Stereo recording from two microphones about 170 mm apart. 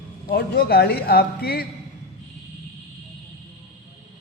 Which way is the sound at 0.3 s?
65° left (ahead or behind).